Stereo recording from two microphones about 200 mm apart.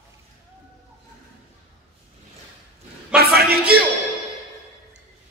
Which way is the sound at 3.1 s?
50° right (ahead or behind).